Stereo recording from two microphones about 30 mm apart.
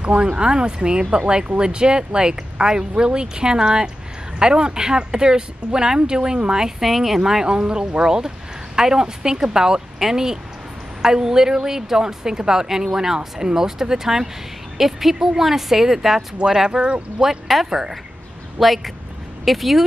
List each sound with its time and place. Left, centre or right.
0.0 s a woman's voice: right
6.8 s speech: centre
7.2 s speech: centre
7.4 s a woman's voice: right
18.6 s speech: centre